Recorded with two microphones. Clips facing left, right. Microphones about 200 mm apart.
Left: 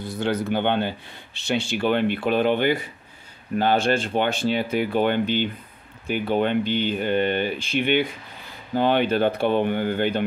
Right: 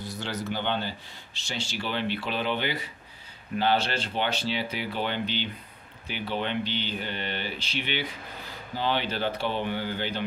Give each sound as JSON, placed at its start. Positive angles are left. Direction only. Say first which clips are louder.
{"t": 0.0, "sound": "speech", "louder": "left 9 dB", "side_deg": 55}